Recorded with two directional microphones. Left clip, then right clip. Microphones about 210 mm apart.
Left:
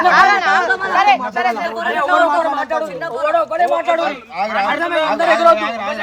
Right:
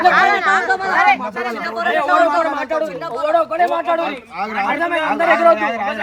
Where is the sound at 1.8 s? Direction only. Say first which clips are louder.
Even; 5° left (ahead or behind).